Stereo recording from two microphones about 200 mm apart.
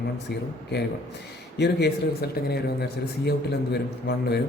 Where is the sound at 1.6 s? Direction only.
55° left (ahead or behind).